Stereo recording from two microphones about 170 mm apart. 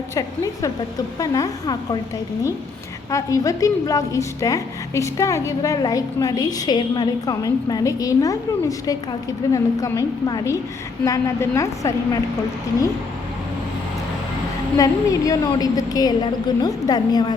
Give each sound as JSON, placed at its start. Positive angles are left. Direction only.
{"t": 0.1, "sound": "a woman's voice", "side_deg": 20}
{"t": 3.1, "sound": "a woman's voice", "side_deg": 20}
{"t": 14.8, "sound": "a woman's voice", "side_deg": 20}